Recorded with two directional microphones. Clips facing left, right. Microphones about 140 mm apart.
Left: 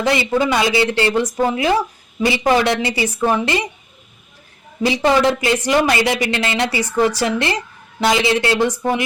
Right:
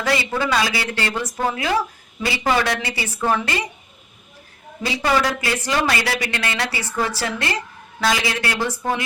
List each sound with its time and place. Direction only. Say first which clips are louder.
0.0 s speech: left 5 dB; 20° left (ahead or behind)
4.8 s speech: left 5 dB; 25° left (ahead or behind)